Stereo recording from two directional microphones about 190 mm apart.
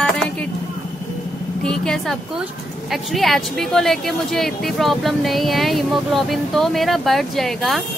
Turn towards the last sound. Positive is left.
turn(degrees=0)  # may be behind; listen again after turning